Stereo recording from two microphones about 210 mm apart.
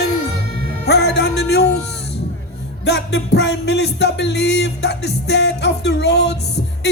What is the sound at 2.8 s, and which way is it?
Music, 50° left (ahead or behind).